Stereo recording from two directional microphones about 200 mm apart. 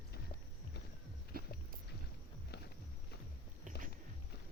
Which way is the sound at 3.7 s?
40° right (ahead or behind).